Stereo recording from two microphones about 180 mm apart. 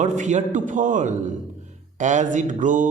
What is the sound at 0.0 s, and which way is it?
A man's voice, 40° right (ahead or behind).